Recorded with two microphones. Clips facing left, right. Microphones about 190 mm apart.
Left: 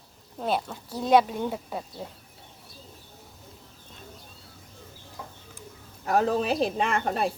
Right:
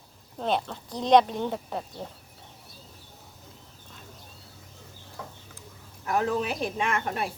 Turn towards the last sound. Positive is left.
turn(degrees=35)  # may be behind; listen again after turning